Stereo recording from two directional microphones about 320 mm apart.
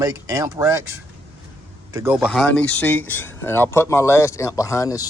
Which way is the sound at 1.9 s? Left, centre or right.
Centre.